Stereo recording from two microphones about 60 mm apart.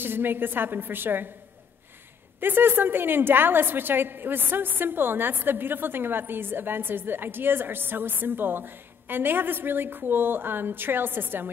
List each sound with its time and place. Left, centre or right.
0.0 s a woman's voice: right
2.4 s a woman's voice: right